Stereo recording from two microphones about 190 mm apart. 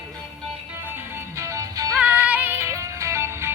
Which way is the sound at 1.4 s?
15° right (ahead or behind).